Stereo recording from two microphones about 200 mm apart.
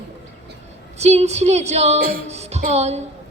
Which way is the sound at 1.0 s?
35° right (ahead or behind).